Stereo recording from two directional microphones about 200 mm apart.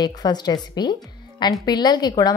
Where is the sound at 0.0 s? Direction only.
20° left (ahead or behind).